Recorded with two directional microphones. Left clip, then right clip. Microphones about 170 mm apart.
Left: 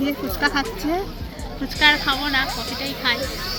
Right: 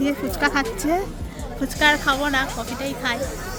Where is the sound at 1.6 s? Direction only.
90° right.